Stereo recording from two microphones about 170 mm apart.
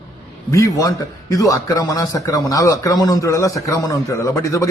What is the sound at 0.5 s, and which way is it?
A man's voice, 20° left (ahead or behind).